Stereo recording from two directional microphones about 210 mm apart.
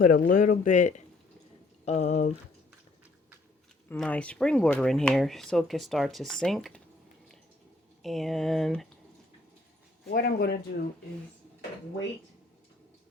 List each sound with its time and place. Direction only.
0.0 s speech: 40° left (ahead or behind)
3.8 s speech: 5° left (ahead or behind)
8.0 s speech: centre (ahead or behind)
10.1 s speech: 45° left (ahead or behind)